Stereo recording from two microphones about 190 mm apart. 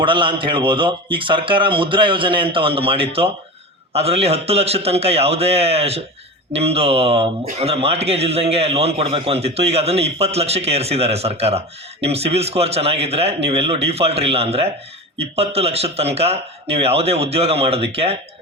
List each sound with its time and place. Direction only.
0.0 s a man's voice: 25° right (ahead or behind)